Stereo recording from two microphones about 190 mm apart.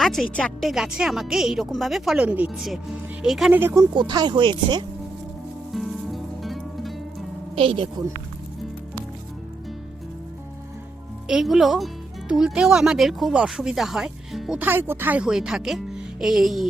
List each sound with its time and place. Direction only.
0.0 s speech: centre (ahead or behind); by 4.9 s 25° right (ahead or behind)
5.7 s music: centre (ahead or behind)
7.5 s speech: 25° right (ahead or behind)
11.3 s speech: centre (ahead or behind)